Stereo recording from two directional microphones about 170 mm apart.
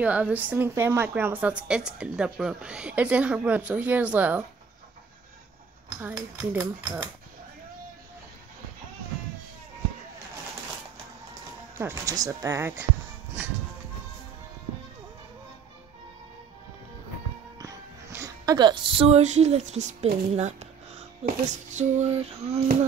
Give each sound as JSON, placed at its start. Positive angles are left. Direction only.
{"t": 0.0, "sound": "speech", "side_deg": -10}
{"t": 5.9, "sound": "speech", "side_deg": -10}
{"t": 11.8, "sound": "speech", "side_deg": -15}
{"t": 13.4, "sound": "music", "side_deg": -10}
{"t": 17.6, "sound": "speech", "side_deg": -20}
{"t": 21.5, "sound": "female singing", "side_deg": -45}